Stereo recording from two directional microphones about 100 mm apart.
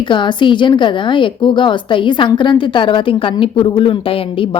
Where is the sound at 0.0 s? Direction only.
50° left (ahead or behind).